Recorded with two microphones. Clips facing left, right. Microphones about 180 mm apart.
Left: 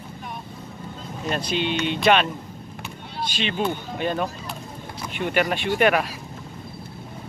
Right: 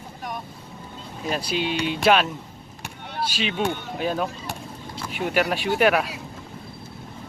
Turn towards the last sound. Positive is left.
turn(degrees=0)  # may be behind; listen again after turning